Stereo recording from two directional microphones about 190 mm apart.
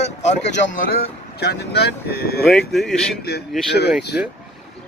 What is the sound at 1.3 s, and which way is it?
Speech, 60° left (ahead or behind).